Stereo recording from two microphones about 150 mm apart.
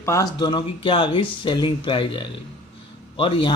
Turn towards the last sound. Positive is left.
turn(degrees=35)  # may be behind; listen again after turning